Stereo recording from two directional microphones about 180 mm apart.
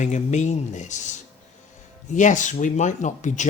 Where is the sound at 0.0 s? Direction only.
40° left (ahead or behind).